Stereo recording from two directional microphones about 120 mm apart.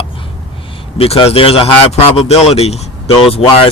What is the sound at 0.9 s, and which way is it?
Speech, 55° left (ahead or behind).